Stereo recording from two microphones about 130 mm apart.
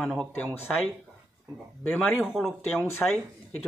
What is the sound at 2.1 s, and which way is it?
Speech, 5° right (ahead or behind).